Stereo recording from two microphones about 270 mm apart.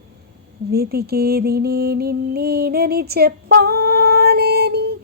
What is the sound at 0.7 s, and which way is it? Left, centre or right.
Music, right.